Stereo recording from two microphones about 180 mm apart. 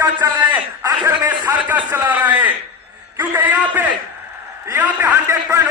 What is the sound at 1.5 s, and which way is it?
A man's voice, 10° right (ahead or behind).